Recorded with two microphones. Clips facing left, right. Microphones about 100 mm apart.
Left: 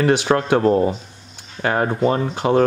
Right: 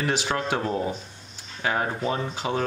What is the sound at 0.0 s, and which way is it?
Speech, 60° left (ahead or behind).